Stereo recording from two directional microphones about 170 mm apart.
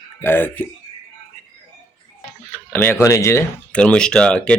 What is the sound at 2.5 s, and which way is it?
Speech, 10° left (ahead or behind).